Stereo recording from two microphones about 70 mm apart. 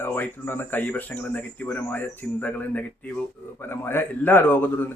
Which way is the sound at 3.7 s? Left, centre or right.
Left.